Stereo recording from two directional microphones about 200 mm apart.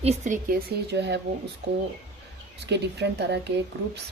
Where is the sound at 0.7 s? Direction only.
55° right (ahead or behind).